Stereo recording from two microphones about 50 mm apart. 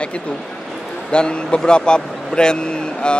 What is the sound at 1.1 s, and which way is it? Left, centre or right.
Speech, centre.